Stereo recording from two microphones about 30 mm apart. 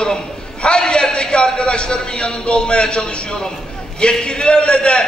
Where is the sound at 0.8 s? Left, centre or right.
Left.